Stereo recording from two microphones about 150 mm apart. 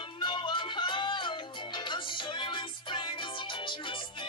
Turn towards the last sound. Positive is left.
turn(degrees=35)  # may be behind; listen again after turning